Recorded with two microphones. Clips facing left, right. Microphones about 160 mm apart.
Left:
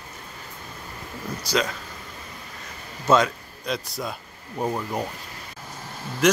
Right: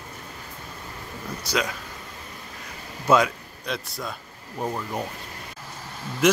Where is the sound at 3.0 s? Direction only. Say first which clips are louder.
Even; 10° right (ahead or behind).